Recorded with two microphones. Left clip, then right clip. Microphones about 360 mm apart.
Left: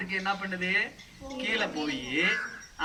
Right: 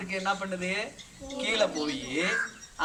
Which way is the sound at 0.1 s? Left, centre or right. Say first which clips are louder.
Right 1 dB; centre.